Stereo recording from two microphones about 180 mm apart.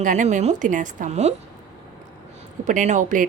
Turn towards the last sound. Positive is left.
turn(degrees=-45)  # may be behind; listen again after turning